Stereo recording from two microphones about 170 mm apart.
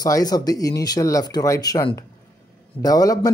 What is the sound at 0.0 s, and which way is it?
Speech, 20° left (ahead or behind).